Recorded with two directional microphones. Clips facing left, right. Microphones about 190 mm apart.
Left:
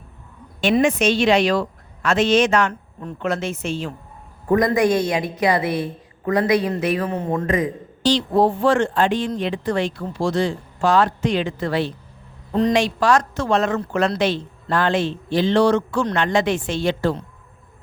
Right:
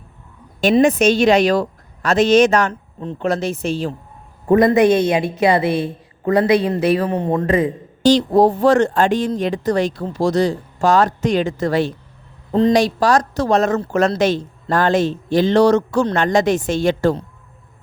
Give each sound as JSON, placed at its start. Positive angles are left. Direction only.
{"t": 0.6, "sound": "a woman's voice", "side_deg": -40}
{"t": 3.0, "sound": "a woman's voice", "side_deg": -30}
{"t": 4.4, "sound": "a woman's voice", "side_deg": -25}
{"t": 8.0, "sound": "speech", "side_deg": -40}
{"t": 12.5, "sound": "a woman's voice", "side_deg": -35}